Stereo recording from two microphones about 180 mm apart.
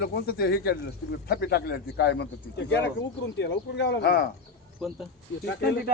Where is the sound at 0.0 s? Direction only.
60° left (ahead or behind).